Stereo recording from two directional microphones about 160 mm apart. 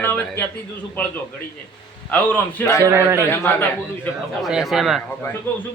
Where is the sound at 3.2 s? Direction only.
15° left (ahead or behind).